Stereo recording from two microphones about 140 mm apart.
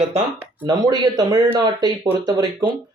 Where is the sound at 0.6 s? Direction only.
30° right (ahead or behind).